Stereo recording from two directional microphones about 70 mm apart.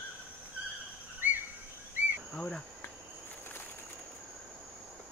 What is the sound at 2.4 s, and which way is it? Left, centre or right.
Speech, centre.